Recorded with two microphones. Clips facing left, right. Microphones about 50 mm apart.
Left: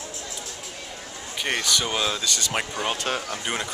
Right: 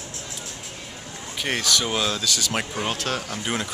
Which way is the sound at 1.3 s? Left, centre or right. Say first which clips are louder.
Right 1 dB; centre.